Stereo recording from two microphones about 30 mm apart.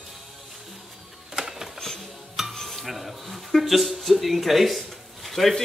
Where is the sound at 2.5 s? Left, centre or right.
Centre.